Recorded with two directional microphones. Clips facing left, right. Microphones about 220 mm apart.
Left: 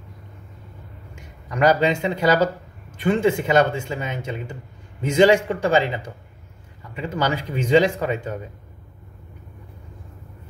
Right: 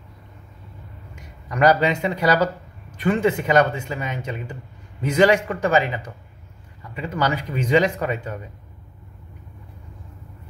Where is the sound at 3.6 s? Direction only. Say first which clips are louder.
Even; 30° left (ahead or behind).